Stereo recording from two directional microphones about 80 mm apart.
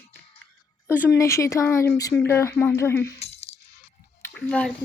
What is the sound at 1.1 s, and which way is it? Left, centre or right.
Speech, left.